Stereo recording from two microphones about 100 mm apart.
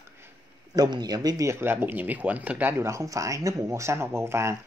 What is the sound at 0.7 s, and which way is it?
Speech, 45° right (ahead or behind).